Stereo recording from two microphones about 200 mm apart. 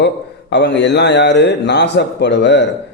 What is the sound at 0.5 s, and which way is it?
A man's voice, 60° left (ahead or behind).